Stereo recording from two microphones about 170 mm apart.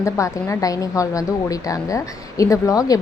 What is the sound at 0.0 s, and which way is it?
A woman's voice, 15° left (ahead or behind).